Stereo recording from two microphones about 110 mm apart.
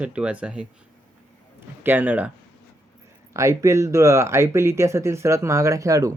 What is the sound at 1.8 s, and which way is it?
Speech, 15° right (ahead or behind).